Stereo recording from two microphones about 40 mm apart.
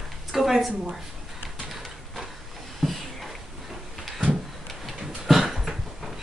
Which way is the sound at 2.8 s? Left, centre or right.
Centre.